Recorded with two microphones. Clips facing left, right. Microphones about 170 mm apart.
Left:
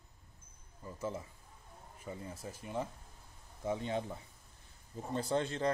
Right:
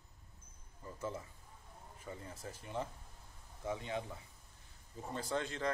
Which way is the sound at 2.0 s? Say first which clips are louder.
Left 3 dB; 15° left (ahead or behind).